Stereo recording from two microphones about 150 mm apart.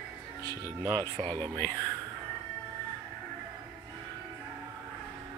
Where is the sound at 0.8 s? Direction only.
25° right (ahead or behind).